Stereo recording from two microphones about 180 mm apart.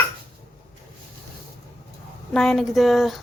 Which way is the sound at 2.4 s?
Centre (ahead or behind).